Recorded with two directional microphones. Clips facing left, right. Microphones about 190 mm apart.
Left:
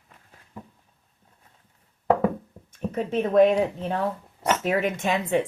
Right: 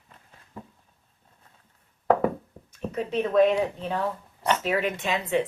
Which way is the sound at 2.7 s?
50° left (ahead or behind).